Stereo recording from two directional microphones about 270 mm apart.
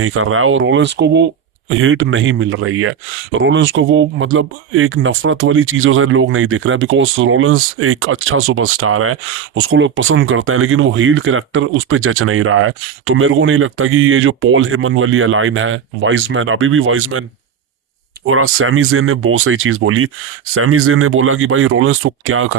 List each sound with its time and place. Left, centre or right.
0.0 s speech: right
18.3 s speech: right